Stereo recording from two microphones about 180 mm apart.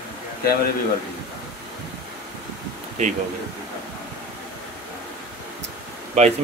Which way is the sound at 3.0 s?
40° right (ahead or behind).